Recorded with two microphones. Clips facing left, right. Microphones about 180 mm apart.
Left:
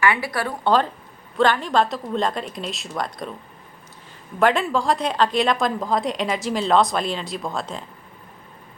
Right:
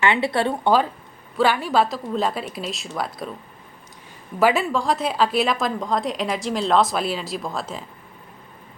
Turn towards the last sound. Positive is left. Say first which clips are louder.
# even
turn(degrees=-5)  # may be behind; listen again after turning